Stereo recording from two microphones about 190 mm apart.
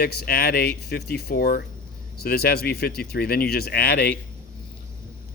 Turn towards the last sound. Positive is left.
turn(degrees=55)  # may be behind; listen again after turning